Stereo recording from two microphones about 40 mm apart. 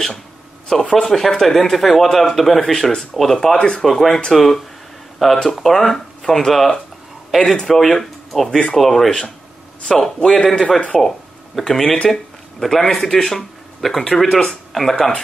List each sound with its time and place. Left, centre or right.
0.7 s speech: centre
2.6 s speech: centre
3.0 s speech: centre
3.5 s speech: left
3.8 s speech: centre
8.5 s speech: left
8.7 s speech: centre
10.3 s speech: left
10.9 s speech: centre